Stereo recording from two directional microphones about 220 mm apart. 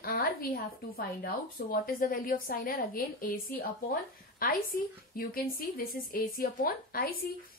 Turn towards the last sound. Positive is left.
turn(degrees=40)  # may be behind; listen again after turning